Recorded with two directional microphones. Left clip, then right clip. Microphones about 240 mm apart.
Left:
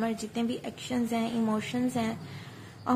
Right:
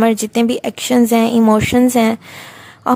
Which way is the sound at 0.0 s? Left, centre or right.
Right.